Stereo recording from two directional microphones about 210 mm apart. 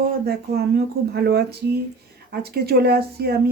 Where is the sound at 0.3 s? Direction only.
50° right (ahead or behind).